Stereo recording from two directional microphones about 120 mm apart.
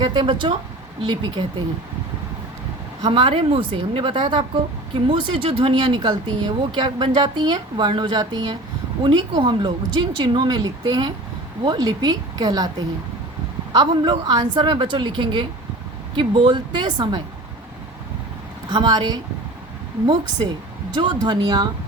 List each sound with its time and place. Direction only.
0.0 s speech: 40° right (ahead or behind)
3.0 s a woman's voice: 45° right (ahead or behind)
13.7 s speech: 35° right (ahead or behind)
18.7 s speech: 35° right (ahead or behind)
20.9 s speech: 40° right (ahead or behind)